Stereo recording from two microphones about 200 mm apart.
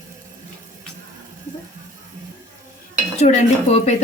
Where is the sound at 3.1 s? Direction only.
35° left (ahead or behind).